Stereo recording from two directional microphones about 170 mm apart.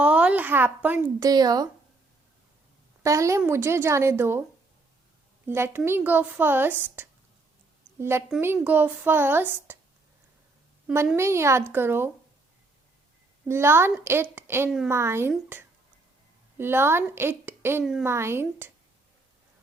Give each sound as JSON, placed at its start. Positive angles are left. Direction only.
{"t": 0.0, "sound": "a woman's voice", "side_deg": -5}
{"t": 1.3, "sound": "speech", "side_deg": -20}
{"t": 3.0, "sound": "a woman's voice", "side_deg": -20}
{"t": 5.5, "sound": "a woman's voice", "side_deg": -15}
{"t": 10.9, "sound": "a woman's voice", "side_deg": -15}
{"t": 13.5, "sound": "a woman's voice", "side_deg": -15}